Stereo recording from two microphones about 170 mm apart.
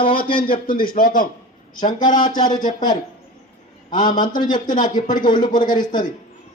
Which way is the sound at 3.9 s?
50° left (ahead or behind).